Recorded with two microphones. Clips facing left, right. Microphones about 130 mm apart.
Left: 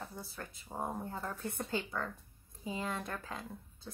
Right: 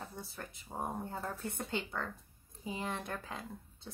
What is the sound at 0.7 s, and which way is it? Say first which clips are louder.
Speech: even; 25° right (ahead or behind).